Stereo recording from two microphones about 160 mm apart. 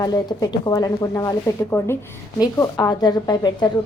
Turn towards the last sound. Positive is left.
turn(degrees=25)  # may be behind; listen again after turning